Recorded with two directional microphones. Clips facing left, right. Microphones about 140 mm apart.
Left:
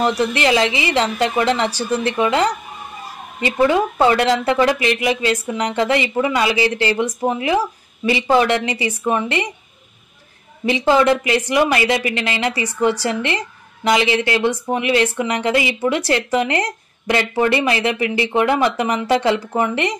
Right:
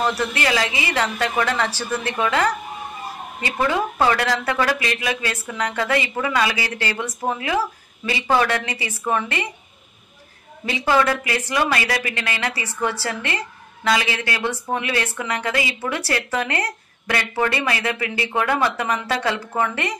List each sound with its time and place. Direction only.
0.0 s a woman's voice: 20° left (ahead or behind)
10.6 s a woman's voice: 20° left (ahead or behind)